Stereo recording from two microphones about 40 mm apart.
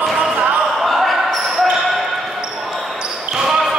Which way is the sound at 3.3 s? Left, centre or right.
Centre.